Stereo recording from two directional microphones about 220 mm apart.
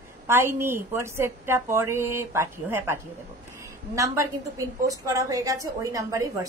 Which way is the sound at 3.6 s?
15° right (ahead or behind).